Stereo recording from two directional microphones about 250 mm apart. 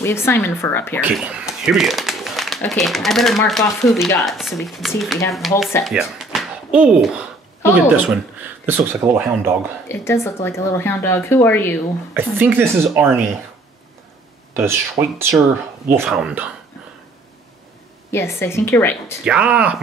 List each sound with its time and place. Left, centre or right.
0.0 s speech: centre
1.0 s a woman's voice: centre
9.8 s speech: centre
12.1 s a woman's voice: centre
14.5 s a woman's voice: centre
18.1 s speech: centre
19.2 s speech: centre